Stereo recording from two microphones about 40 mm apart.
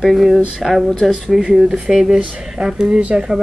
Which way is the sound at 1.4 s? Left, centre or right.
Centre.